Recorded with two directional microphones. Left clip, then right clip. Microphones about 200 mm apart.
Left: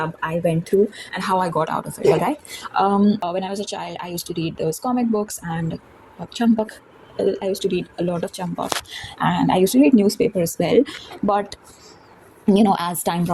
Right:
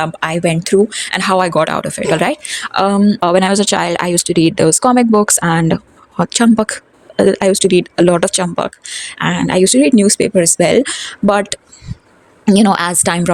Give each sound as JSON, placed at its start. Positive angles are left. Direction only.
{"t": 0.0, "sound": "speech", "side_deg": -85}
{"t": 1.6, "sound": "speech", "side_deg": -45}